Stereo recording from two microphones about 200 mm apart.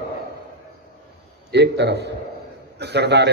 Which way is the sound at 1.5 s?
60° right (ahead or behind).